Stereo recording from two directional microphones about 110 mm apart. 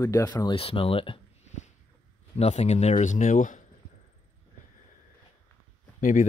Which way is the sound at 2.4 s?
85° left.